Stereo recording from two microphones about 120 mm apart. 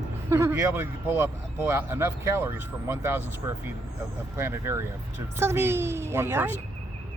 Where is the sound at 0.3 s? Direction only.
25° right (ahead or behind).